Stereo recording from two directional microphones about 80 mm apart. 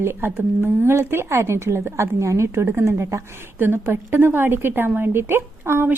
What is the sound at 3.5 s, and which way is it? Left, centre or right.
Speech, right.